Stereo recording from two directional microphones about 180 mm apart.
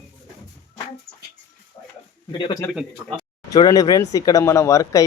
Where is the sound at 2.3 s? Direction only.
25° left (ahead or behind).